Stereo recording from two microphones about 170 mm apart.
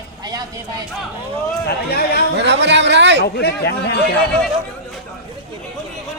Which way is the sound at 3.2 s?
70° left (ahead or behind).